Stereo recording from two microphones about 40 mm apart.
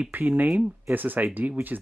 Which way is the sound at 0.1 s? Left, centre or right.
Right.